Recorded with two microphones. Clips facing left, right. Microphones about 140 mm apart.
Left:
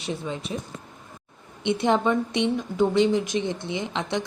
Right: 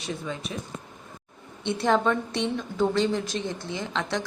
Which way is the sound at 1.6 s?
20° left (ahead or behind).